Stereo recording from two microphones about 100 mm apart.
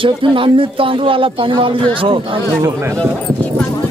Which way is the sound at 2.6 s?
30° right (ahead or behind).